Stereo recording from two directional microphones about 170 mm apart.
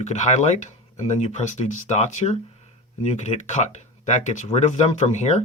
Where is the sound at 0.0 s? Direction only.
45° left (ahead or behind).